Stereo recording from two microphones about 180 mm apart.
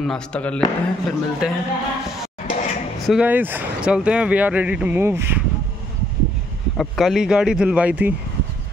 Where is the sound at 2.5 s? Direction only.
40° left (ahead or behind).